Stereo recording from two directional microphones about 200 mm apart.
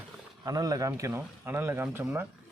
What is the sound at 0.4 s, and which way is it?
Speech, 20° right (ahead or behind).